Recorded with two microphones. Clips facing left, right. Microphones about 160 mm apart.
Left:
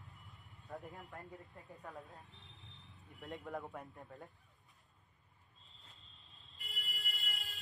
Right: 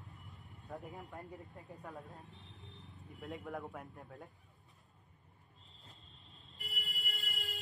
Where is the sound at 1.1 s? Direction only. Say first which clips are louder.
Right 3 dB; 20° right (ahead or behind).